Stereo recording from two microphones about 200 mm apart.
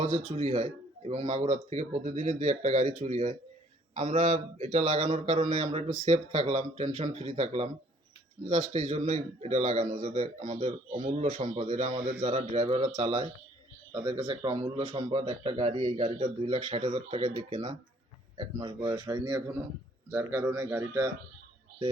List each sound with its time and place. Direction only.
0.0 s a man's voice: 35° right (ahead or behind); by 21.1 s 10° right (ahead or behind)